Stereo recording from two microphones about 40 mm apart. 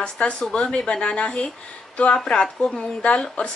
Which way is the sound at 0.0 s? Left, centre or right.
Left.